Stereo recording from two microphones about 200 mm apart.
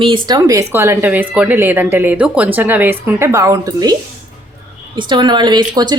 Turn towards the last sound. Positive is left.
turn(degrees=-20)  # may be behind; listen again after turning